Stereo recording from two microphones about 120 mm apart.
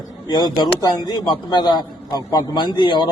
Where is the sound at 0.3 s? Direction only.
35° left (ahead or behind).